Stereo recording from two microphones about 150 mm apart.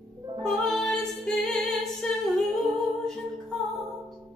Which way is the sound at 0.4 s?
5° left (ahead or behind).